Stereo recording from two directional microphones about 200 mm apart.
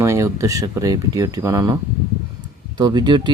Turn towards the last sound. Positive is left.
turn(degrees=-20)  # may be behind; listen again after turning